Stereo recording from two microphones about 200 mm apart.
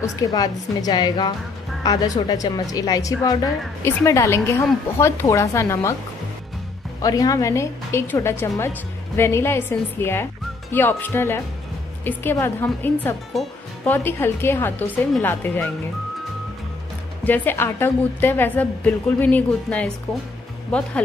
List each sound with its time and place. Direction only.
0.0 s a woman's voice: 20° left (ahead or behind)
7.0 s a woman's voice: 20° left (ahead or behind)
17.2 s a woman's voice: 10° left (ahead or behind)